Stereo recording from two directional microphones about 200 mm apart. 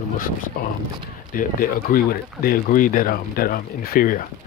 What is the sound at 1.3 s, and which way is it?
Speech, 45° left (ahead or behind).